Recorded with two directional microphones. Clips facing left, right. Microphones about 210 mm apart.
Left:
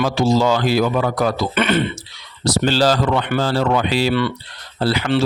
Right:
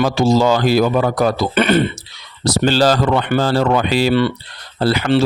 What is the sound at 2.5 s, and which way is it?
Speech, 50° right (ahead or behind).